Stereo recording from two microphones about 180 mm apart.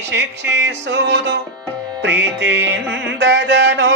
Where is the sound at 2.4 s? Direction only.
80° right.